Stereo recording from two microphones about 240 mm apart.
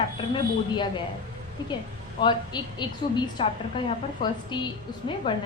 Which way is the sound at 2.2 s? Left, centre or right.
Centre.